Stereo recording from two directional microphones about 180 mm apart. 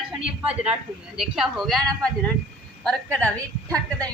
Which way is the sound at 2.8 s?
5° left (ahead or behind).